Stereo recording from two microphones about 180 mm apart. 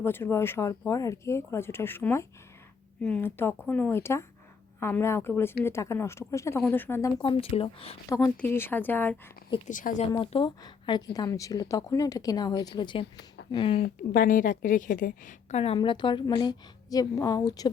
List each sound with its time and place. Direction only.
0.0 s speech: 15° left (ahead or behind)
7.2 s a woman's voice: 30° left (ahead or behind)
8.4 s speech: 10° left (ahead or behind)
9.6 s speech: 45° left (ahead or behind)
10.2 s a woman's voice: 30° left (ahead or behind)
13.8 s a woman's voice: 50° left (ahead or behind); by 17.7 s 20° left (ahead or behind)